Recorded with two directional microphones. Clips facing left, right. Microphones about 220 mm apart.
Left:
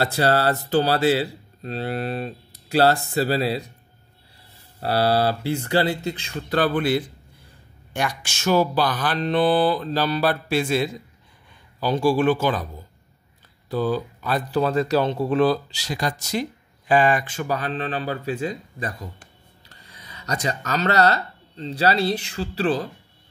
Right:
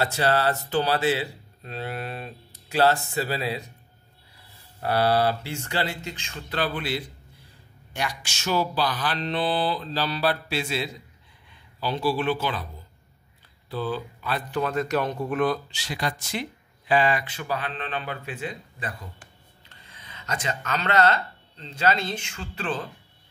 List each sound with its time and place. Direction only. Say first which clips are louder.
0.0 s speech: left 3 dB; 40° left (ahead or behind)
4.7 s speech: left 2 dB; 30° left (ahead or behind)
13.7 s speech: left 6 dB; 45° left (ahead or behind)
20.1 s speech: left 4 dB; 40° left (ahead or behind)